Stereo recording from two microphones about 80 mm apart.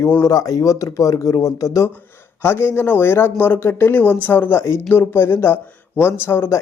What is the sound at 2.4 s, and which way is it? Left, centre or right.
A man's voice, left.